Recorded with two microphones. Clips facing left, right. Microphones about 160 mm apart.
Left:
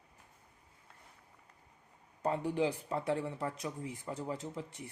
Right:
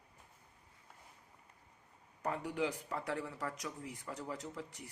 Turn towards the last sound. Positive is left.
turn(degrees=25)  # may be behind; listen again after turning